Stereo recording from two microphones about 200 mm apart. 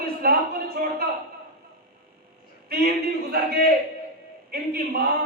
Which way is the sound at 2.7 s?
50° right (ahead or behind).